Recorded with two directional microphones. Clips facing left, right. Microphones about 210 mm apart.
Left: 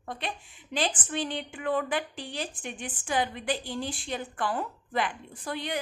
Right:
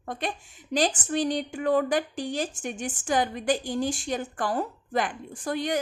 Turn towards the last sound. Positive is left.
turn(degrees=-45)  # may be behind; listen again after turning